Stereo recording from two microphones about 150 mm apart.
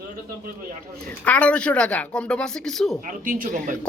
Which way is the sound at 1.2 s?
10° left (ahead or behind).